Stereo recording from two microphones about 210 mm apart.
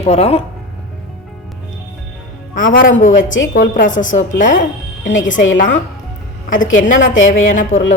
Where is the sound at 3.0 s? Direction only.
40° left (ahead or behind).